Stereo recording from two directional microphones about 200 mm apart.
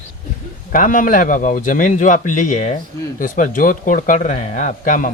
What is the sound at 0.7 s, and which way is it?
A man's voice, 40° left (ahead or behind).